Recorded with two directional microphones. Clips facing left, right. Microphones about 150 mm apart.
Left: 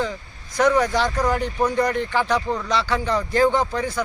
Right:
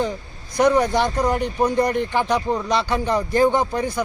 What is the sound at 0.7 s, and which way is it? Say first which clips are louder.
Speech: right 1 dB; 25° right (ahead or behind).